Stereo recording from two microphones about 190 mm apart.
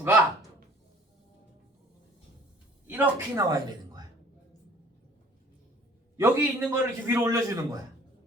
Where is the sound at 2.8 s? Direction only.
10° right (ahead or behind).